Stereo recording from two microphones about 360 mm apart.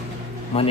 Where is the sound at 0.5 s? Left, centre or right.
Centre.